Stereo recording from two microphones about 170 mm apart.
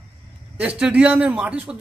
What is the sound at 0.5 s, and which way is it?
A man's voice, 5° right (ahead or behind).